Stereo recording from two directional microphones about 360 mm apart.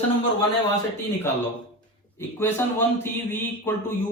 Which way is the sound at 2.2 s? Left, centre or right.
Centre.